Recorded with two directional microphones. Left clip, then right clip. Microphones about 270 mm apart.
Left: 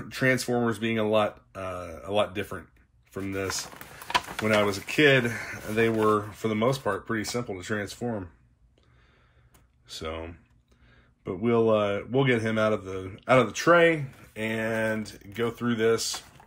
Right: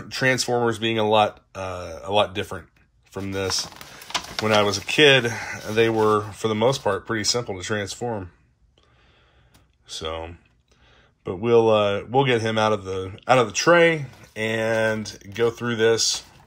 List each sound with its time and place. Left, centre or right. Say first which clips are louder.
0.1 s a man's voice: right 4 dB; centre
9.8 s a man's voice: right 5 dB; centre